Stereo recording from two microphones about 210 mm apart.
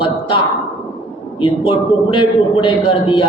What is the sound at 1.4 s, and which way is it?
A man's voice, 25° left (ahead or behind).